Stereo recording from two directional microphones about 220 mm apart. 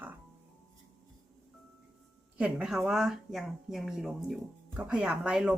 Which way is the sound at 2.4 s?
5° right (ahead or behind).